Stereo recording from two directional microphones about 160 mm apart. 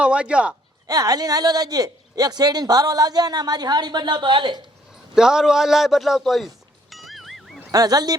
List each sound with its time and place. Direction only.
0.0 s speech: 5° right (ahead or behind)
0.9 s a man's voice: 25° right (ahead or behind)
5.1 s a man's voice: 5° right (ahead or behind)
6.9 s music: centre (ahead or behind)
7.7 s a man's voice: 25° right (ahead or behind)